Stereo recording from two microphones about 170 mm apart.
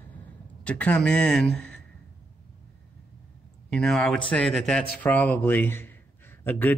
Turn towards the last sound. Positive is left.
turn(degrees=10)  # may be behind; listen again after turning